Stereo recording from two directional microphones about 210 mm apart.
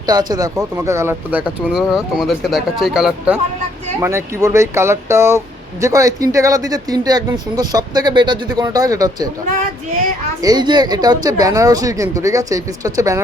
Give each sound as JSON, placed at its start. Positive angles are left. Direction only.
{"t": 0.1, "sound": "speech", "side_deg": -20}
{"t": 10.4, "sound": "speech", "side_deg": -20}